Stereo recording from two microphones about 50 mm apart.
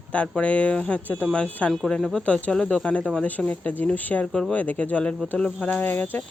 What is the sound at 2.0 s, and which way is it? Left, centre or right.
Speech, centre.